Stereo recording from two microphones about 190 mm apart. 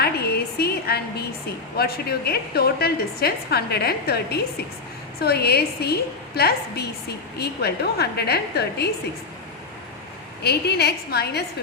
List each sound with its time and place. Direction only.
0.0 s a sound: 55° left (ahead or behind)
1.7 s a woman's voice: 55° left (ahead or behind)
10.4 s a woman's voice: 60° left (ahead or behind)